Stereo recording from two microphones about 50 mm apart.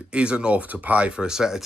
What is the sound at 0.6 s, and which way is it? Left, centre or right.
Speech, right.